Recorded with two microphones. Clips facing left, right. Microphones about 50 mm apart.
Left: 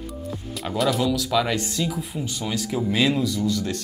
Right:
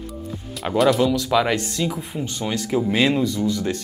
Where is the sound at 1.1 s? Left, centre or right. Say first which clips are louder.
Right 3 dB; right.